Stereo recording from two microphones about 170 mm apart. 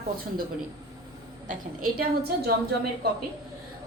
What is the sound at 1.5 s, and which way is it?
Speech, 50° right (ahead or behind).